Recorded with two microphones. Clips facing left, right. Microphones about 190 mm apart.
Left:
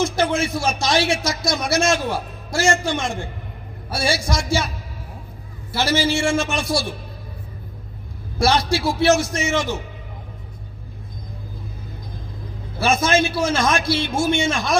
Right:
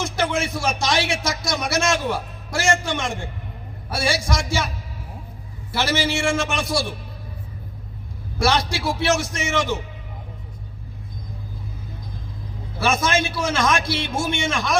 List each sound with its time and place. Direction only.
0.0 s a man's voice: 30° left (ahead or behind)
5.7 s a man's voice: 30° left (ahead or behind)
8.4 s a man's voice: 30° left (ahead or behind)
12.8 s a man's voice: 30° left (ahead or behind)